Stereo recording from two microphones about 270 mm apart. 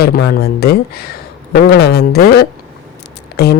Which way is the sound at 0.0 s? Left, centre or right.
Left.